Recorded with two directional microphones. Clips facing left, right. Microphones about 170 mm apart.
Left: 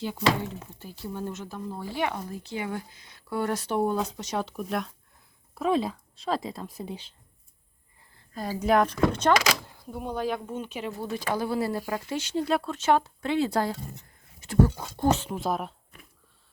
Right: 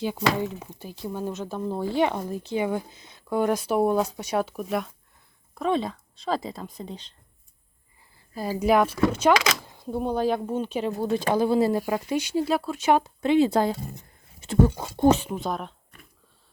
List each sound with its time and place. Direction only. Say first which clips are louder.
0.0 s speech: right 2 dB; 15° right (ahead or behind); by 7.1 s 10° left (ahead or behind)
8.3 s speech: right 2 dB; 5° right (ahead or behind)
9.7 s speech: right 6 dB; 25° right (ahead or behind)
15.3 s speech: even; centre (ahead or behind)